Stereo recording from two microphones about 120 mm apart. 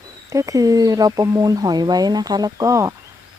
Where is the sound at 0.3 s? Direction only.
25° right (ahead or behind).